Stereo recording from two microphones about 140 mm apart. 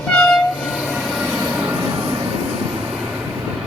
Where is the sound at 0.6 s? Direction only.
5° right (ahead or behind).